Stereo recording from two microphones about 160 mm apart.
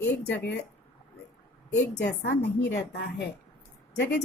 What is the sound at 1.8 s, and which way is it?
Speech, 90° left.